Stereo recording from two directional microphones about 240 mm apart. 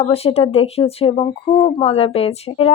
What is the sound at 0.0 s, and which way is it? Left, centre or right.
A woman's voice, left.